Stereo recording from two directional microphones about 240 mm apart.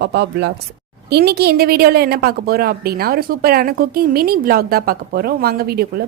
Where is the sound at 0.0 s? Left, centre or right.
Right.